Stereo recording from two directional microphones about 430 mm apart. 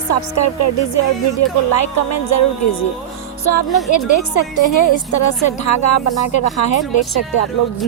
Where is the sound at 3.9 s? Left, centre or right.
Left.